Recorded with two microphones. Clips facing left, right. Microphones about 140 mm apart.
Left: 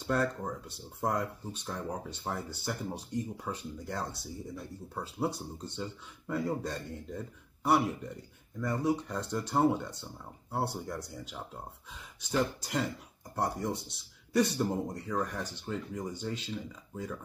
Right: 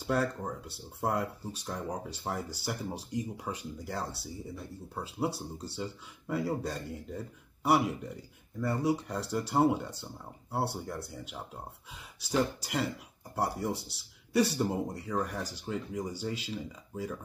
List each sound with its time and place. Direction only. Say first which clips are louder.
0.0 s speech: even; 5° right (ahead or behind)
2.6 s speech: even; 5° right (ahead or behind)
12.3 s speech: right 1 dB; 10° right (ahead or behind)